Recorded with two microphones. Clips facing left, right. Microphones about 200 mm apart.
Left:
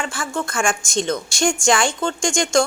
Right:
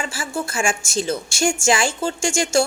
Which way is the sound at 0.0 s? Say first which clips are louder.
Left 1 dB; 10° right (ahead or behind).